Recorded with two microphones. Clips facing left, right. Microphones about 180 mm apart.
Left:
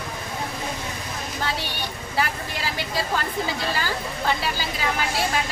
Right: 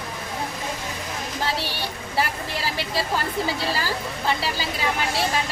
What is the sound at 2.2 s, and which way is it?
Vehicle, 30° right (ahead or behind).